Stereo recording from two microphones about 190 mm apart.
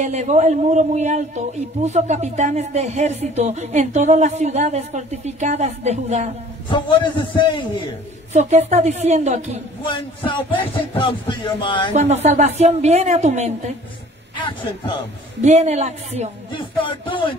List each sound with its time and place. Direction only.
0.0 s a man's voice: 40° right (ahead or behind)
6.7 s speech: 25° left (ahead or behind)
8.3 s a man's voice: 35° right (ahead or behind)
10.5 s speech: 25° left (ahead or behind)
11.9 s a man's voice: 35° right (ahead or behind)
15.4 s a man's voice: 35° right (ahead or behind)
16.5 s speech: 25° left (ahead or behind)